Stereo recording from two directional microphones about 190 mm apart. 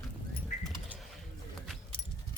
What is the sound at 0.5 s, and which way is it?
Bird, 40° left (ahead or behind).